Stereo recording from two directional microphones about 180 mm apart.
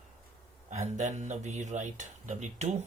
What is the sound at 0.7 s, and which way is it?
Speech, 40° right (ahead or behind).